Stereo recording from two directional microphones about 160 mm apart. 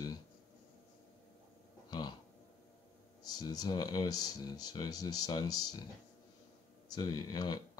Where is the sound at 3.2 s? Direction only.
25° left (ahead or behind).